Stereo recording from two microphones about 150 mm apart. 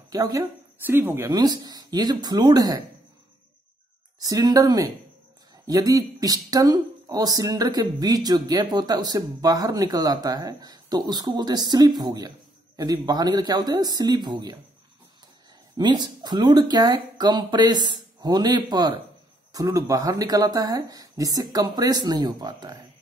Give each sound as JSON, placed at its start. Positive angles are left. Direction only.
{"t": 0.1, "sound": "speech", "side_deg": -25}
{"t": 1.3, "sound": "speech", "side_deg": -25}
{"t": 4.2, "sound": "speech", "side_deg": -25}
{"t": 15.8, "sound": "speech", "side_deg": -30}